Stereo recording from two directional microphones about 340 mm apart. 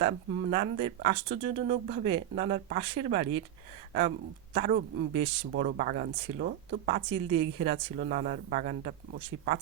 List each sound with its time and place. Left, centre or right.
0.0 s speech: centre
4.5 s speech: right